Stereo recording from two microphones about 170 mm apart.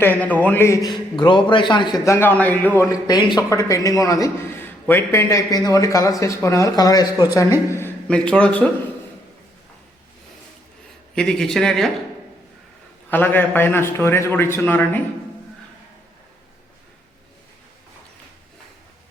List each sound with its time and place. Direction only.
0.0 s a man's voice: 10° left (ahead or behind)
11.1 s speech: 5° left (ahead or behind)
13.1 s a man's voice: 10° left (ahead or behind)